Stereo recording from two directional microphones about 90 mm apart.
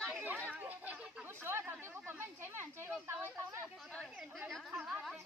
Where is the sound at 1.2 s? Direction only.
25° right (ahead or behind).